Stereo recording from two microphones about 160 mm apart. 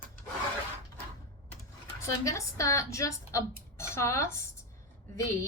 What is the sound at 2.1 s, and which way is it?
A woman's voice, 20° left (ahead or behind).